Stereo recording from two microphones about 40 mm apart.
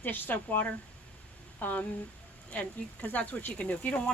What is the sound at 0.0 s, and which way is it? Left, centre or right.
Speech, left.